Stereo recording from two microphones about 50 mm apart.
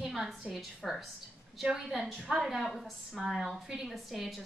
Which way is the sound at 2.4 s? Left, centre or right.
Centre.